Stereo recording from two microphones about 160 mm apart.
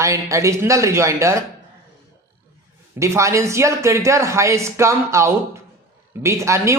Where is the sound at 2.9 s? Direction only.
20° right (ahead or behind).